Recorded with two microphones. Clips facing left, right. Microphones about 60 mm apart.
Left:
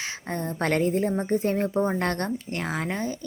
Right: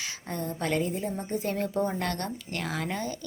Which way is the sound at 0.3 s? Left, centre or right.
Left.